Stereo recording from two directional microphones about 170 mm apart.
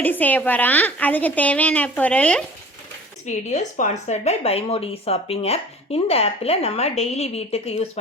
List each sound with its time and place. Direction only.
0.0 s a woman's voice: 10° left (ahead or behind)
3.2 s speech: 45° left (ahead or behind)